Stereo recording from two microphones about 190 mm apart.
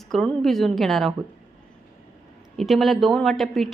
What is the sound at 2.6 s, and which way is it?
A woman's voice, centre (ahead or behind).